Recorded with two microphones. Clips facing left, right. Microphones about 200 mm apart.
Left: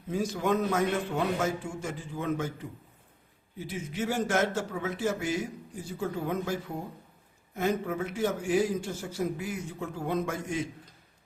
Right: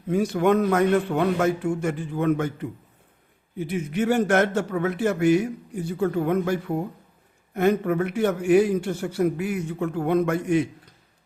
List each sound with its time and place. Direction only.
0.1 s a man's voice: 65° right (ahead or behind)